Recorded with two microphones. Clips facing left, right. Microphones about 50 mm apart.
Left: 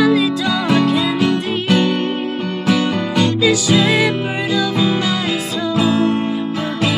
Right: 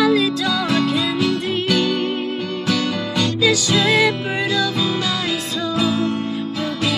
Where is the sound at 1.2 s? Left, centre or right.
Left.